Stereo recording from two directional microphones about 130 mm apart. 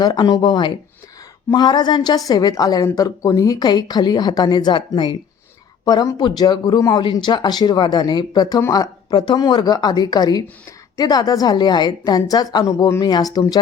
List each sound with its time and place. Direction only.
0.0 s a woman's voice: 30° left (ahead or behind)
7.0 s a woman's voice: 40° left (ahead or behind)